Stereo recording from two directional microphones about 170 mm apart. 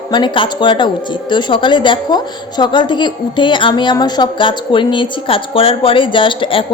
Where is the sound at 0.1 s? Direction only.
25° left (ahead or behind).